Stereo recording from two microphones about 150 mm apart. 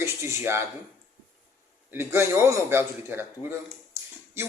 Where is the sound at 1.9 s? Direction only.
15° right (ahead or behind).